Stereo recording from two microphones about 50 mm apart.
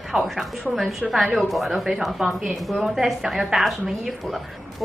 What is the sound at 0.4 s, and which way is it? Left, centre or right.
A woman's voice, centre.